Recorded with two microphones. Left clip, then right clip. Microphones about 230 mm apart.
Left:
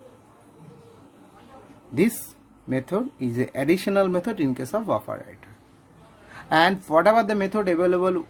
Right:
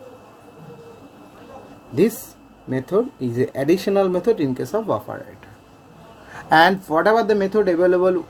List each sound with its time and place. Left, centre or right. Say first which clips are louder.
2.6 s speech: right 6 dB; left
6.5 s speech: right 4 dB; centre